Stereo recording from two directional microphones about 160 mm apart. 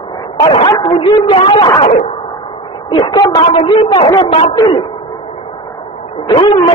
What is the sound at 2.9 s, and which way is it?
A man's voice, 30° left (ahead or behind).